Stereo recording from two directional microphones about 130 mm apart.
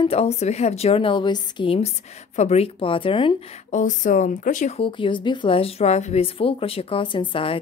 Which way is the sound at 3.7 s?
75° left (ahead or behind).